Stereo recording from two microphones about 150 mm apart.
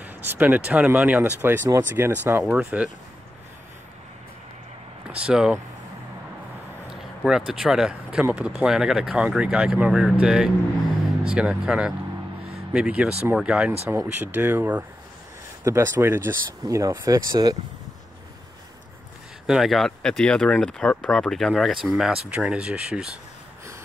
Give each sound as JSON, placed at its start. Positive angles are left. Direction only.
{"t": 0.0, "sound": "speech", "side_deg": -10}
{"t": 5.1, "sound": "speech", "side_deg": -5}
{"t": 7.2, "sound": "speech", "side_deg": -5}
{"t": 19.4, "sound": "speech", "side_deg": 0}